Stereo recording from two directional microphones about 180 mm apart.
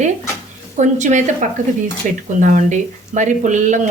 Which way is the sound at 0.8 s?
40° right (ahead or behind).